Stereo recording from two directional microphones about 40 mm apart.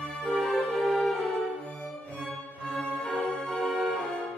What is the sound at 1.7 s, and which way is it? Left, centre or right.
Music, left.